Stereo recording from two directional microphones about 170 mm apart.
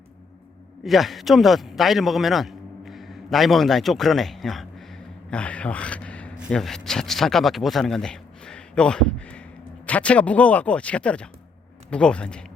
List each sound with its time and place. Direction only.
0.9 s a man's voice: centre (ahead or behind)